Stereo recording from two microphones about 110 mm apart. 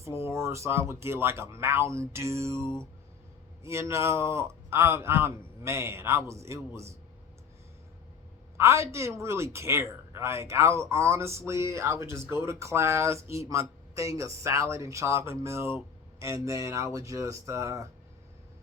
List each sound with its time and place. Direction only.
0.0 s a man's voice: 25° right (ahead or behind)
8.5 s a man's voice: 25° right (ahead or behind)